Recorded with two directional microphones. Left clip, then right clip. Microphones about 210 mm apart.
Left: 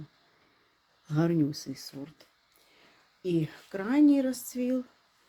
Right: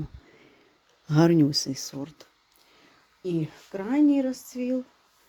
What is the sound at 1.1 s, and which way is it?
Speech, 35° right (ahead or behind).